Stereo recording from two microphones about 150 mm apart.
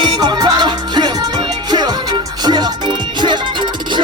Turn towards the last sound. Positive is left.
turn(degrees=-30)  # may be behind; listen again after turning